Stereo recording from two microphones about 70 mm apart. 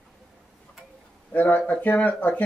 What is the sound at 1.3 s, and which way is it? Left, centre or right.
Speech, left.